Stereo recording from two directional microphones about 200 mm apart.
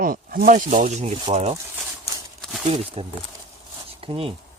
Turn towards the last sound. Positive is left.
turn(degrees=-25)  # may be behind; listen again after turning